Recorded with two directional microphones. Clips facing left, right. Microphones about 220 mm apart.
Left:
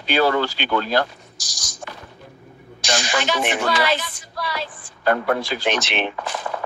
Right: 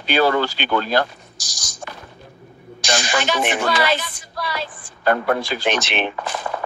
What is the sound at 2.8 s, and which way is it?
Speech, 50° right (ahead or behind).